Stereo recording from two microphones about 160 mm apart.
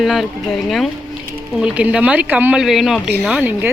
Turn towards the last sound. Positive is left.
turn(degrees=-10)  # may be behind; listen again after turning